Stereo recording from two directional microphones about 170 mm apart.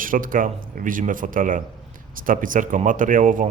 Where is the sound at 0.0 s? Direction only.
55° right (ahead or behind).